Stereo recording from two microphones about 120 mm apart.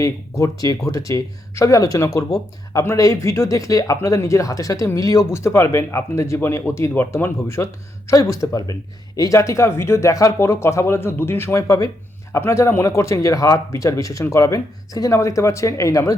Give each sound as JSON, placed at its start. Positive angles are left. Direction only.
{"t": 0.0, "sound": "speech", "side_deg": 25}